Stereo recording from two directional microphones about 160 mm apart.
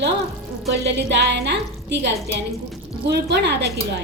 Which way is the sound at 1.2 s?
90° right.